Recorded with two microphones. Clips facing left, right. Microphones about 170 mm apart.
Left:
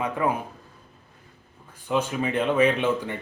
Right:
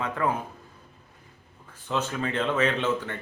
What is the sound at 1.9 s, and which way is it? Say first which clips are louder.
Speech: left 4 dB; 10° left (ahead or behind).